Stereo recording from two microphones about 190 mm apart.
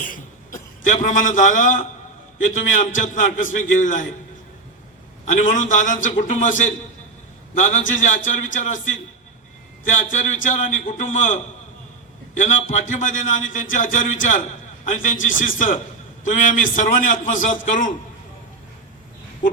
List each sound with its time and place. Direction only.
0.0 s cough: 45° left (ahead or behind)
1.4 s a man's voice: 40° left (ahead or behind)
5.2 s a man's voice: 40° left (ahead or behind)
9.9 s a man's voice: 40° left (ahead or behind)